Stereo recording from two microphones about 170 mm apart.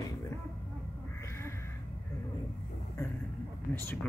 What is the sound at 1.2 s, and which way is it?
Crow, 15° left (ahead or behind).